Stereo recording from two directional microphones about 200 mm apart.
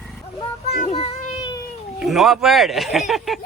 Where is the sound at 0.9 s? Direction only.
25° left (ahead or behind).